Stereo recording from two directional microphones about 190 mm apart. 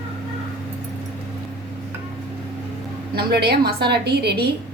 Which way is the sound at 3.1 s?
60° right (ahead or behind).